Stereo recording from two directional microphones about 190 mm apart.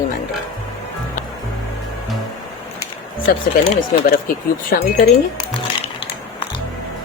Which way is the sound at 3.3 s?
50° left (ahead or behind).